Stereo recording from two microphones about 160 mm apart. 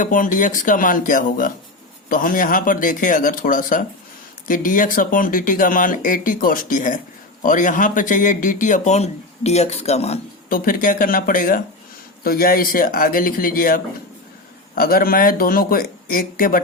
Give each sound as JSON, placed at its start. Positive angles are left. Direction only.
{"t": 0.0, "sound": "speech", "side_deg": 55}
{"t": 10.5, "sound": "speech", "side_deg": 60}